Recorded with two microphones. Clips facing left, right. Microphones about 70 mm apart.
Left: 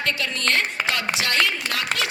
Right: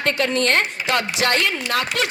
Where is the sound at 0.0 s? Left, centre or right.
Right.